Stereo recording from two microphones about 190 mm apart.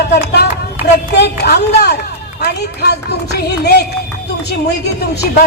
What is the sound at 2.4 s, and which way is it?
A woman's voice, 60° left (ahead or behind).